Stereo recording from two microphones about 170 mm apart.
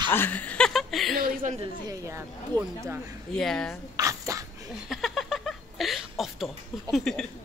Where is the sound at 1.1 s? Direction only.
55° right (ahead or behind).